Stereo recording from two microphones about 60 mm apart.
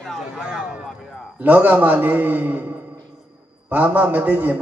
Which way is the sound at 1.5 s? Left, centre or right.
Right.